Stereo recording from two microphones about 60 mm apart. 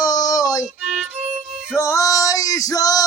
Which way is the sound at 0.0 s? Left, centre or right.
Left.